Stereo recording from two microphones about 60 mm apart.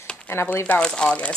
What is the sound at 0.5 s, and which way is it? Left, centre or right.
Speech, left.